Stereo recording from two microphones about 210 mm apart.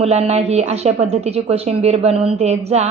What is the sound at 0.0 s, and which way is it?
A woman's voice, 30° right (ahead or behind).